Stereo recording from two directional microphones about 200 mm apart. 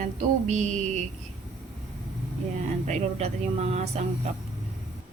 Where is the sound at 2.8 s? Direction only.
35° right (ahead or behind).